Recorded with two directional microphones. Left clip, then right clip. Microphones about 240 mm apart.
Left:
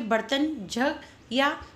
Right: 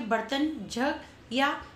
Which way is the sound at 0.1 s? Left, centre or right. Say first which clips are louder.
Left 3 dB; left.